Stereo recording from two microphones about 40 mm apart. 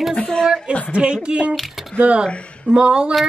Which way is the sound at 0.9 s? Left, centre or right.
Right.